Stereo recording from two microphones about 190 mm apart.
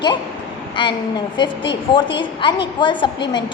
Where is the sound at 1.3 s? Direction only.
25° left (ahead or behind).